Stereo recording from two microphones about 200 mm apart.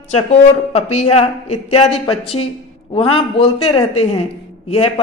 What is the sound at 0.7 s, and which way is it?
A man's voice, 35° left (ahead or behind).